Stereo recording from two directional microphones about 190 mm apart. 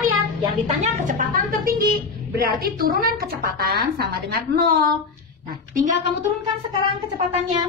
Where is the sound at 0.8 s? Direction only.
40° right (ahead or behind).